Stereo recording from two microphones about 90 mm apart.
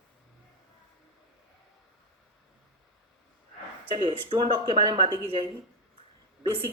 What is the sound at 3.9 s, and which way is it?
Speech, 70° right (ahead or behind).